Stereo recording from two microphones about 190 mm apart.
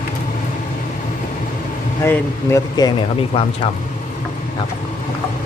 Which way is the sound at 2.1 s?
15° left (ahead or behind).